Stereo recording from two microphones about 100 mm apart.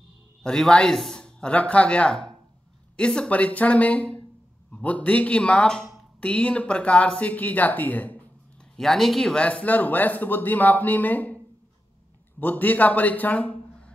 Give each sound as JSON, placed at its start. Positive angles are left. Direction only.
{"t": 0.4, "sound": "a man's voice", "side_deg": 5}
{"t": 8.7, "sound": "speech", "side_deg": 0}
{"t": 12.4, "sound": "a man's voice", "side_deg": 15}